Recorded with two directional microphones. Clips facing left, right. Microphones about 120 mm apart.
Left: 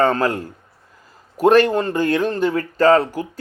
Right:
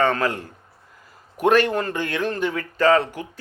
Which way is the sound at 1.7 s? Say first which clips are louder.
Left 6 dB; 30° left (ahead or behind).